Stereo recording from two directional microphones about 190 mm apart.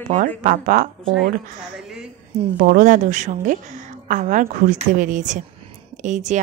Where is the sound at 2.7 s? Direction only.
45° right (ahead or behind).